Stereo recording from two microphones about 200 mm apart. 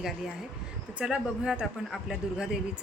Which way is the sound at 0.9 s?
5° right (ahead or behind).